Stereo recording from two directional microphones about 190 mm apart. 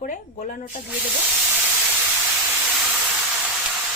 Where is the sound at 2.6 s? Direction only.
5° right (ahead or behind).